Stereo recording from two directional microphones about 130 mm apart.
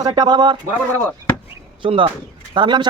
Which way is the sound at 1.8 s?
40° right (ahead or behind).